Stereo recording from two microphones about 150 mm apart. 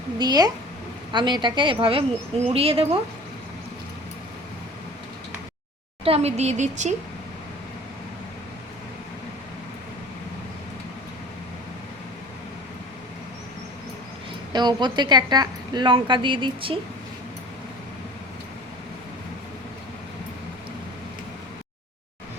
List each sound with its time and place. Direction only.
0.2 s a woman's voice: 25° right (ahead or behind)
6.1 s speech: 45° right (ahead or behind)
14.5 s speech: 30° right (ahead or behind)